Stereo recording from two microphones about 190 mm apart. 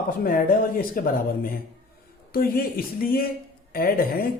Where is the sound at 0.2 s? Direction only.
50° left (ahead or behind).